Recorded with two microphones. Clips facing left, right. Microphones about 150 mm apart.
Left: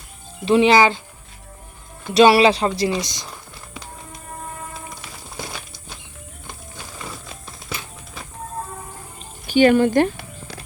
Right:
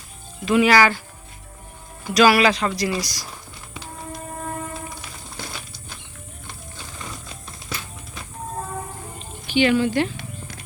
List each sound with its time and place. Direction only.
0.4 s speech: 25° left (ahead or behind)
2.1 s speech: 30° left (ahead or behind)
7.3 s music: centre (ahead or behind)
9.5 s speech: 45° left (ahead or behind)